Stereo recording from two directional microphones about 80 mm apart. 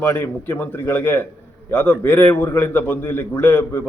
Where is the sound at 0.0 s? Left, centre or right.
Left.